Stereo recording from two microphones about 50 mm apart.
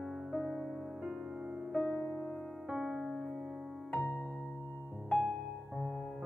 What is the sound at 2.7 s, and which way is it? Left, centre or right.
Keyboard, centre.